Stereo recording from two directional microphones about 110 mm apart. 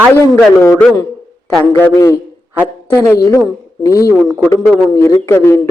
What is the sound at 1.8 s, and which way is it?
A man's voice, 20° left (ahead or behind).